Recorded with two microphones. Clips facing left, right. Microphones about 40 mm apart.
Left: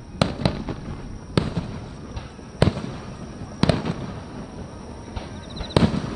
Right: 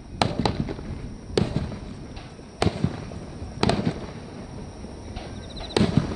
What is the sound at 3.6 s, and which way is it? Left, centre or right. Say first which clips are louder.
Fireworks: left 2 dB; centre.